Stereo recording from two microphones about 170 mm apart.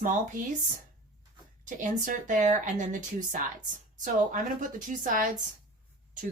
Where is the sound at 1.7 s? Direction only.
50° right (ahead or behind).